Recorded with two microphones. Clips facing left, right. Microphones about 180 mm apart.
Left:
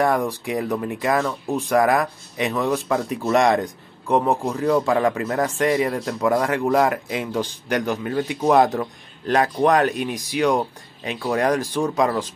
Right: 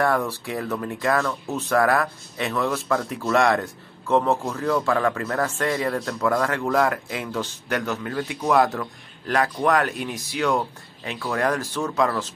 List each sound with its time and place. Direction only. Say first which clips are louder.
0.0 s speech: left 2 dB; 15° left (ahead or behind)